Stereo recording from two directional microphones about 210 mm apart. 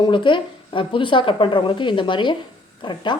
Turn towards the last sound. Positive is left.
turn(degrees=20)  # may be behind; listen again after turning